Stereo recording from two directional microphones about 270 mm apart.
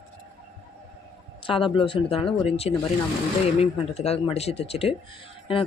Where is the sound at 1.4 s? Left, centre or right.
Centre.